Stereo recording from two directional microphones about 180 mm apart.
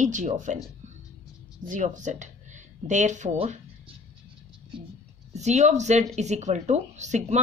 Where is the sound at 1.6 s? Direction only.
45° right (ahead or behind).